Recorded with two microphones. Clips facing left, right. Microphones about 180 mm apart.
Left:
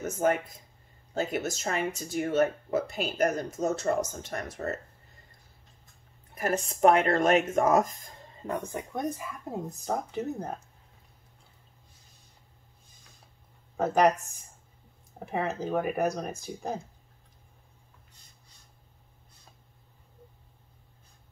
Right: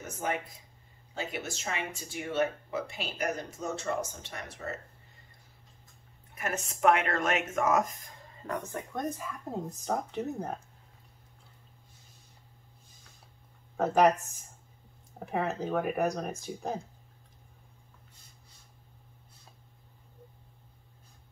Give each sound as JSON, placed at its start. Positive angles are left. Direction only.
{"t": 0.0, "sound": "speech", "side_deg": 45}
{"t": 6.3, "sound": "speech", "side_deg": 35}
{"t": 8.5, "sound": "speech", "side_deg": 20}
{"t": 9.2, "sound": "speech", "side_deg": 5}
{"t": 13.7, "sound": "speech", "side_deg": 0}
{"t": 15.1, "sound": "speech", "side_deg": 0}